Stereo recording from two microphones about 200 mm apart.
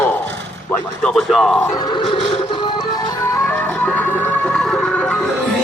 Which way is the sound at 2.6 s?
25° left (ahead or behind).